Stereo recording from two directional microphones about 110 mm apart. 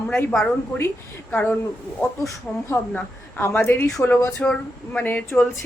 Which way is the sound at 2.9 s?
20° left (ahead or behind).